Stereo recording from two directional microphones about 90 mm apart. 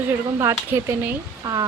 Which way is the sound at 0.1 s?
30° right (ahead or behind).